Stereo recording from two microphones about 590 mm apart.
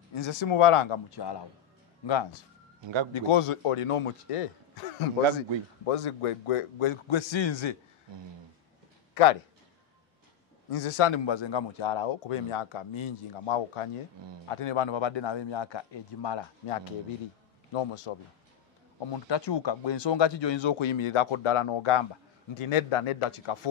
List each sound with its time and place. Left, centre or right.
0.1 s speech: left
2.8 s a man's voice: right
3.1 s a man's voice: left
9.1 s a man's voice: left
10.7 s a man's voice: left
14.2 s a man's voice: right
14.5 s speech: left
17.7 s a man's voice: left
18.9 s speech: left